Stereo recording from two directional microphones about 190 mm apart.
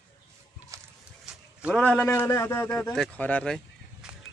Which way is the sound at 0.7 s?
15° right (ahead or behind).